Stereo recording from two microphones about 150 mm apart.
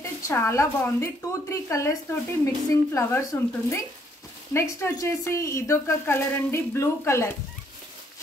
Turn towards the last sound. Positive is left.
turn(degrees=20)  # may be behind; listen again after turning